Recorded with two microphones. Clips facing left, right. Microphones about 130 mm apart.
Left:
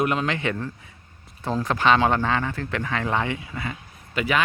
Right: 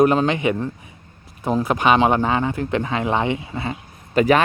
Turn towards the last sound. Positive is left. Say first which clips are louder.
# right 9 dB
turn(degrees=-40)  # may be behind; listen again after turning